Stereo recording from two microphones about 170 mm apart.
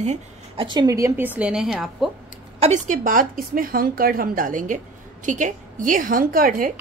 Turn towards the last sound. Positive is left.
turn(degrees=-55)  # may be behind; listen again after turning